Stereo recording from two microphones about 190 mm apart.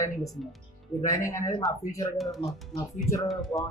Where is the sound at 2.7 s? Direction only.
15° left (ahead or behind).